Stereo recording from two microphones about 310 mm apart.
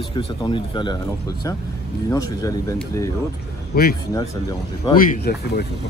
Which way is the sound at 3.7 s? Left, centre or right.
Left.